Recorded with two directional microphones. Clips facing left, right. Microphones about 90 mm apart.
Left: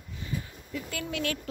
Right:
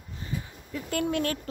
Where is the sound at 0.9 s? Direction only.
50° right (ahead or behind).